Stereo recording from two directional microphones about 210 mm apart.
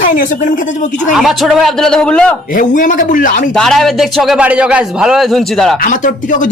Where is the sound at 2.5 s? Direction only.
40° left (ahead or behind).